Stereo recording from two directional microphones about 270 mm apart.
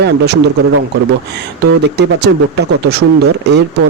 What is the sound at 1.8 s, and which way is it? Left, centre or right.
Speech, right.